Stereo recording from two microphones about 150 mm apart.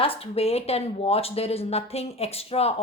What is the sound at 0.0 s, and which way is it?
A woman's voice, 40° left (ahead or behind).